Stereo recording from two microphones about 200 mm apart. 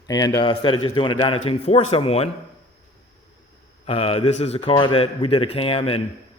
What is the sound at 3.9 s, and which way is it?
A man's voice, 25° left (ahead or behind).